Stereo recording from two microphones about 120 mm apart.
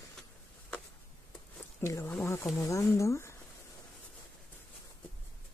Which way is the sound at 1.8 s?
25° left (ahead or behind).